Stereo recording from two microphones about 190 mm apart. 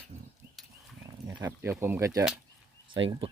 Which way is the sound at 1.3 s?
20° right (ahead or behind).